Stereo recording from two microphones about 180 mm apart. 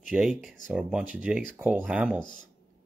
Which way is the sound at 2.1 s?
25° left (ahead or behind).